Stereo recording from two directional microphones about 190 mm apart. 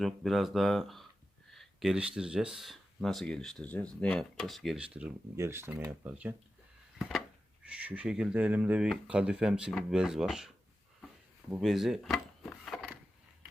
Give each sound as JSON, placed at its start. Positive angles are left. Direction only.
{"t": 0.0, "sound": "speech", "side_deg": 0}
{"t": 7.6, "sound": "speech", "side_deg": -5}
{"t": 11.5, "sound": "speech", "side_deg": 0}